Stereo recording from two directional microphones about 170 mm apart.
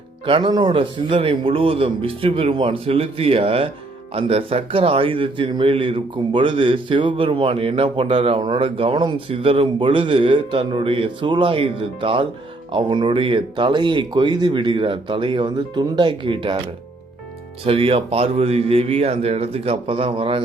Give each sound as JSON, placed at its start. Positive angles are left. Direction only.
{"t": 0.3, "sound": "a man's voice", "side_deg": -30}
{"t": 17.7, "sound": "a man's voice", "side_deg": -35}